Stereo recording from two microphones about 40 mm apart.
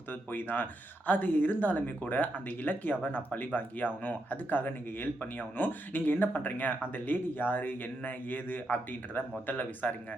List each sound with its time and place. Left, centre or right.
0.1 s speech: left
9.5 s speech: left